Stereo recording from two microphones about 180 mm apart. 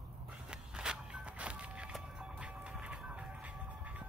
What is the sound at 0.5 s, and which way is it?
Walk, 5° right (ahead or behind).